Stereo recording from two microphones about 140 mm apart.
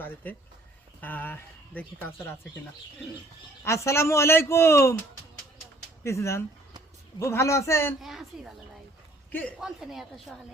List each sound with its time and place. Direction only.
1.0 s speech: 15° left (ahead or behind)
3.6 s a man's voice: 20° left (ahead or behind)
6.0 s a man's voice: 20° left (ahead or behind)
8.0 s speech: centre (ahead or behind)
9.6 s speech: centre (ahead or behind)